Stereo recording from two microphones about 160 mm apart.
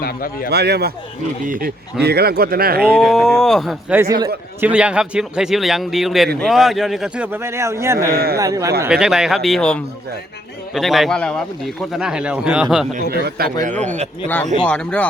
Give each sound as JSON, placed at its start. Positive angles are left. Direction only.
{"t": 0.0, "sound": "speech", "side_deg": 65}
{"t": 0.5, "sound": "speech", "side_deg": -90}
{"t": 1.5, "sound": "speech", "side_deg": -65}
{"t": 2.8, "sound": "a man's voice", "side_deg": -5}
{"t": 3.9, "sound": "a man's voice", "side_deg": -20}
{"t": 4.6, "sound": "a man's voice", "side_deg": -5}
{"t": 8.1, "sound": "speech", "side_deg": -75}
{"t": 8.4, "sound": "a man's voice", "side_deg": -20}
{"t": 8.9, "sound": "a man's voice", "side_deg": -5}
{"t": 13.1, "sound": "a man's voice", "side_deg": -80}
{"t": 13.6, "sound": "a man's voice", "side_deg": -50}
{"t": 14.6, "sound": "speech", "side_deg": 5}